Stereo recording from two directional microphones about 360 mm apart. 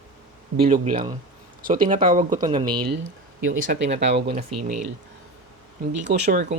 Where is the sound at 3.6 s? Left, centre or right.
Right.